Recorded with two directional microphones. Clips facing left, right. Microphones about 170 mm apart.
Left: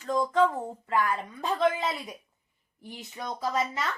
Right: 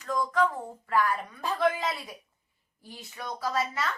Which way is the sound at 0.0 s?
25° left (ahead or behind).